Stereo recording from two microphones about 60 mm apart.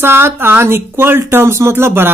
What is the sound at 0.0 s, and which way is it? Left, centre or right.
Speech, right.